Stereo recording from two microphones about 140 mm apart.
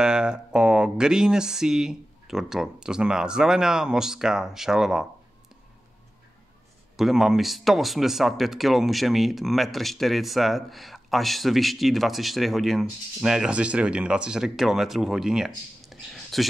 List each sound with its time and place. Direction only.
0.0 s speech: 5° right (ahead or behind)
7.0 s speech: centre (ahead or behind)